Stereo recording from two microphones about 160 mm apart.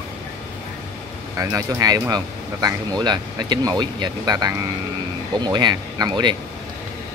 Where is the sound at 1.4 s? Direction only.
20° right (ahead or behind).